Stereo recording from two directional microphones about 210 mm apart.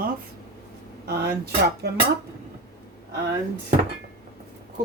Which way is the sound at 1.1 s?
50° right (ahead or behind).